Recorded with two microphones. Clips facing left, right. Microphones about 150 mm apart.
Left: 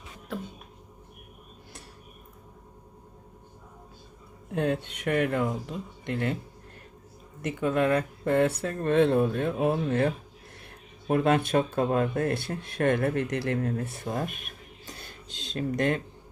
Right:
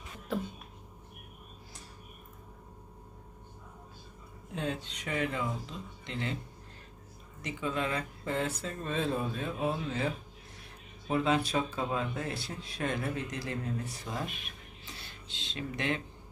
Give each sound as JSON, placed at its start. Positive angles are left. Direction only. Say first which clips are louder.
{"t": 0.3, "sound": "a sound", "louder": "right 2 dB", "side_deg": 0}
{"t": 4.5, "sound": "speech", "louder": "left 8 dB", "side_deg": 60}
{"t": 7.4, "sound": "speech", "louder": "left 9 dB", "side_deg": 55}